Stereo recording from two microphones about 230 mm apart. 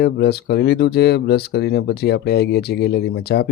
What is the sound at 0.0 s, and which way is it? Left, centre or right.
Speech, left.